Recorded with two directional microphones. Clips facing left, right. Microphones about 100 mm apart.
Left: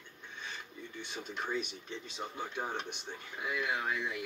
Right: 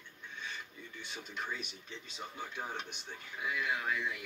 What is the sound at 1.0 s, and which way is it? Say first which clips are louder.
Speech: left 2 dB; centre (ahead or behind).